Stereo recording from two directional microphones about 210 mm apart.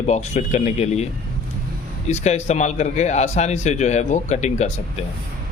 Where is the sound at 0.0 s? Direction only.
35° left (ahead or behind).